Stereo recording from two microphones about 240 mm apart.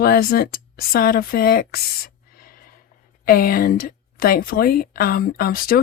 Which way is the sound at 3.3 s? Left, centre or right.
Left.